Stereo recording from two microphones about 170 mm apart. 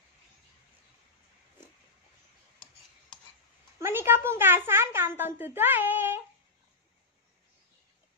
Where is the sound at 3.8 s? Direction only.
15° right (ahead or behind).